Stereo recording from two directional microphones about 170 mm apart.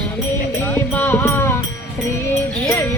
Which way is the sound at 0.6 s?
10° left (ahead or behind).